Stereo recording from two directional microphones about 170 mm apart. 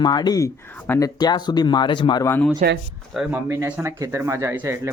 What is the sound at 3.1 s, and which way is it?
Speech, 5° right (ahead or behind).